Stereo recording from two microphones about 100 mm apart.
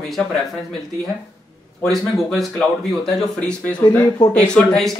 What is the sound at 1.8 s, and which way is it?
Speech, centre (ahead or behind).